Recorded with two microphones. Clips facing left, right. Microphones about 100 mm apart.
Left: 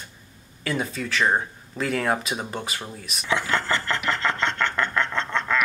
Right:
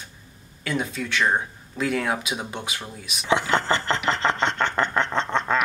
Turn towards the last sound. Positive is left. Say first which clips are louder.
# right 2 dB
turn(degrees=-25)  # may be behind; listen again after turning